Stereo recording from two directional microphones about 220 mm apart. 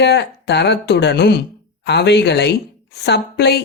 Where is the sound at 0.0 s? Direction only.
50° left (ahead or behind).